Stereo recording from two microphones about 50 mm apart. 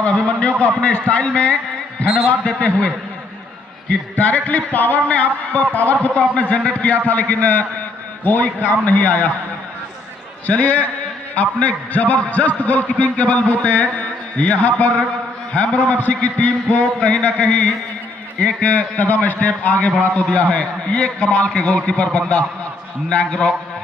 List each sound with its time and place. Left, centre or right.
0.0 s a sound: centre
1.0 s a man's voice: left
4.2 s a man's voice: left
10.4 s a man's voice: left